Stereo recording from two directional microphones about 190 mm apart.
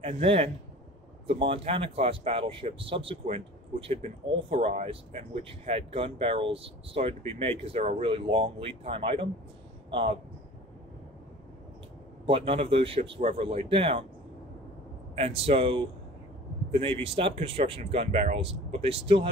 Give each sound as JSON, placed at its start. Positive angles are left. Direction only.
{"t": 0.0, "sound": "a man's voice", "side_deg": -30}
{"t": 12.3, "sound": "speech", "side_deg": -30}
{"t": 15.1, "sound": "speech", "side_deg": -30}